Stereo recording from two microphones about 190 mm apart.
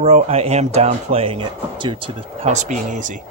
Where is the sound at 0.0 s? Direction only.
35° right (ahead or behind).